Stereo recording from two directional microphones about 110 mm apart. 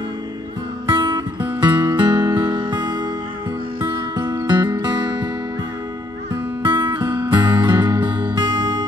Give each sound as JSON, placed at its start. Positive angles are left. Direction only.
{"t": 0.8, "sound": "music", "side_deg": -45}
{"t": 6.6, "sound": "music", "side_deg": -45}